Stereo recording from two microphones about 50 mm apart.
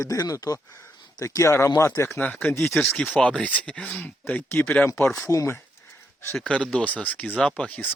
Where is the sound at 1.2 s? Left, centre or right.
Left.